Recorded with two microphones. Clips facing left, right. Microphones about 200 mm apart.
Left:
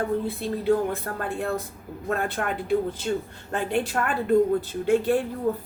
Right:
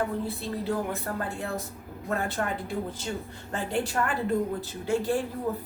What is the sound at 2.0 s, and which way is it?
Speech, 60° left (ahead or behind).